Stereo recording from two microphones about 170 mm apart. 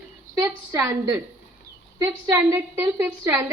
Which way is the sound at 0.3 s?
15° right (ahead or behind).